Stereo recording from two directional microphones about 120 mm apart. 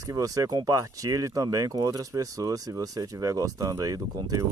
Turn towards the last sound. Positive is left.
turn(degrees=-30)  # may be behind; listen again after turning